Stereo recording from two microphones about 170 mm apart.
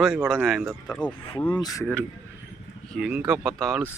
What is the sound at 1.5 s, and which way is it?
Speech, 25° left (ahead or behind).